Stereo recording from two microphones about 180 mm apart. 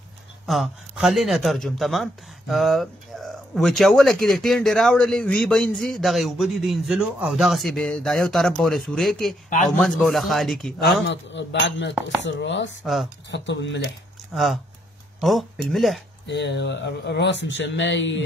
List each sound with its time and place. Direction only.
0.5 s speech: centre (ahead or behind)
10.8 s speech: 80° left
12.8 s speech: centre (ahead or behind)
13.3 s speech: 75° left (ahead or behind)
14.3 s speech: centre (ahead or behind)
16.3 s speech: 70° left (ahead or behind); by 18.2 s 90° left